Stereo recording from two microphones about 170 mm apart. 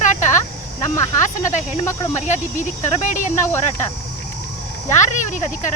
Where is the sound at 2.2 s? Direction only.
45° left (ahead or behind).